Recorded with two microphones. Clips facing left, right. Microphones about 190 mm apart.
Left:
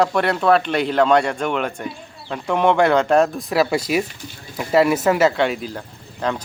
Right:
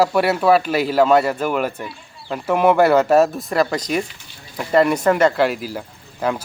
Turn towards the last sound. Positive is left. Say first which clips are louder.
# right 2 dB
turn(degrees=-5)  # may be behind; listen again after turning